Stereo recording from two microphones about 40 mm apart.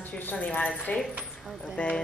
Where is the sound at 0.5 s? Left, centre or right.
Left.